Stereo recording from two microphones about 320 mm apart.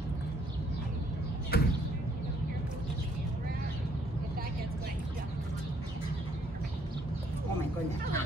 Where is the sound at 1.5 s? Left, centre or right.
Left.